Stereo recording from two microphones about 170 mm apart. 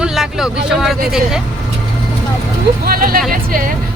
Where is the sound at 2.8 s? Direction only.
60° right (ahead or behind).